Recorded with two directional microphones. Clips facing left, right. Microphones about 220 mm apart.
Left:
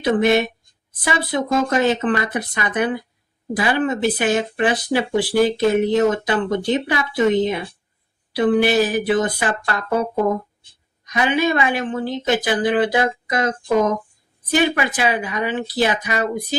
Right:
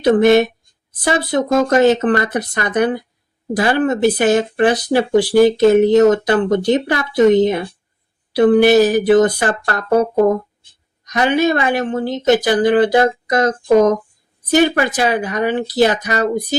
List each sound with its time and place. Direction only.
0.0 s speech: 40° right (ahead or behind)
8.3 s speech: 40° right (ahead or behind)